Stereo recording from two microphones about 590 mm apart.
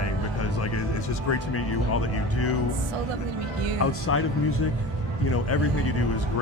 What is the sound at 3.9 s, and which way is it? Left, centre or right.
Speech, left.